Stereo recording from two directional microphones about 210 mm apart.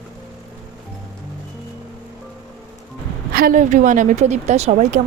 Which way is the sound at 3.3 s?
40° right (ahead or behind).